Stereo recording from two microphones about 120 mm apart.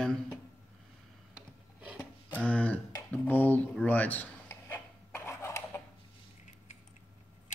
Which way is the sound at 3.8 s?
15° left (ahead or behind).